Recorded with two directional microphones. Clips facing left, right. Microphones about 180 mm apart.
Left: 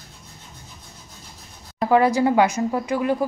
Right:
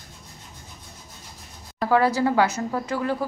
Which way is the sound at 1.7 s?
20° left (ahead or behind).